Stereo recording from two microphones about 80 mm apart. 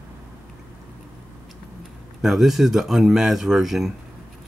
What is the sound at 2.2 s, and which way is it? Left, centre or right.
Speech, centre.